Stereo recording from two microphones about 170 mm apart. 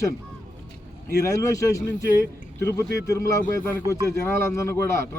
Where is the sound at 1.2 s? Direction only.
20° left (ahead or behind).